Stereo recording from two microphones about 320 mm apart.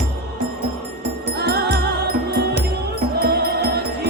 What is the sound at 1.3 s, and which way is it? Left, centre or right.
Music, right.